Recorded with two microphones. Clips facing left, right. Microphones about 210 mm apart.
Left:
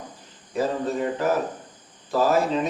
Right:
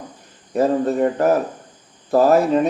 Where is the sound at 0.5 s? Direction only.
60° right (ahead or behind).